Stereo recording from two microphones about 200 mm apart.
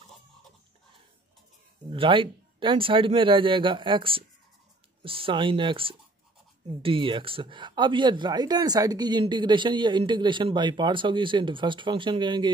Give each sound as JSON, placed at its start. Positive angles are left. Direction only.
{"t": 1.9, "sound": "speech", "side_deg": -25}